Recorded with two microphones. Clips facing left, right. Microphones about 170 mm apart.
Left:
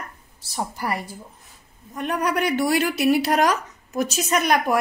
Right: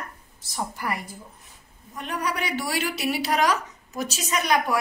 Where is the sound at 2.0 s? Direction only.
50° left (ahead or behind).